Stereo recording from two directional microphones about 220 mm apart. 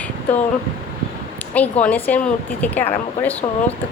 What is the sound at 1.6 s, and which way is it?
Speech, 5° left (ahead or behind).